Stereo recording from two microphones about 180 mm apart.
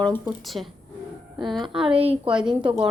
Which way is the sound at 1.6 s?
30° right (ahead or behind).